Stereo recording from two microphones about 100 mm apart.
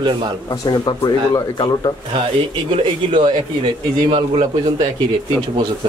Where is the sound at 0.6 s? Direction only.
45° left (ahead or behind).